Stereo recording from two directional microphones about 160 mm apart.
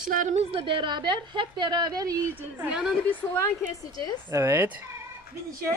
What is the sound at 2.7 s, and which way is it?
Speech, 5° right (ahead or behind).